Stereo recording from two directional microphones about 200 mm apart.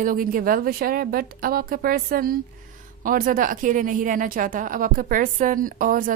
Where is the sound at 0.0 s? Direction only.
45° right (ahead or behind).